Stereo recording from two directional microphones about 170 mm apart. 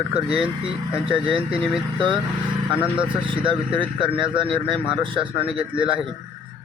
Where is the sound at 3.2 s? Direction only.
30° right (ahead or behind).